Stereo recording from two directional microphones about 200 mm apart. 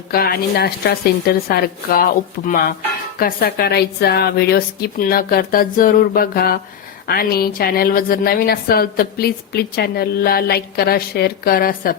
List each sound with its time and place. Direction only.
0.1 s a woman's voice: 50° left (ahead or behind)